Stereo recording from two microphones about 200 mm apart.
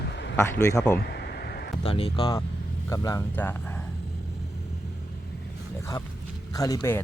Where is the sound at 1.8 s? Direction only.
30° left (ahead or behind); by 3.5 s 15° left (ahead or behind).